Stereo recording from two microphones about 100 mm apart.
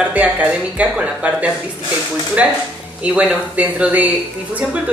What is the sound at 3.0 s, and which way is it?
Speech, 15° right (ahead or behind).